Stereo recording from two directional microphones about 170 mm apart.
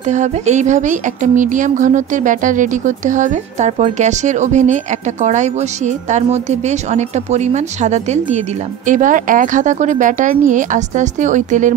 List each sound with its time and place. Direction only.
0.1 s speech: 45° right (ahead or behind)